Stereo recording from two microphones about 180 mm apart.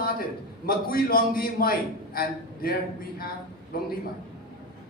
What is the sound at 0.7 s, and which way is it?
A man's voice, 55° left (ahead or behind).